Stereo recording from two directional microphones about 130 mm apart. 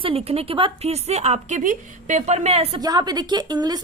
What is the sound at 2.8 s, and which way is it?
A woman's voice, 30° right (ahead or behind).